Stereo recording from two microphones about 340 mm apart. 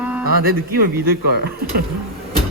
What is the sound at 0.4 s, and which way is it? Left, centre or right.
Speech, right.